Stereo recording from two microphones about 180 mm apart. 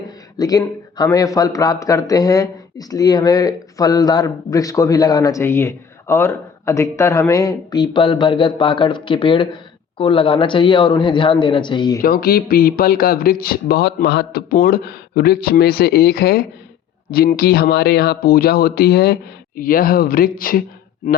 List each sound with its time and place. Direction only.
0.3 s a man's voice: 20° left (ahead or behind)
12.0 s a man's voice: 55° left (ahead or behind)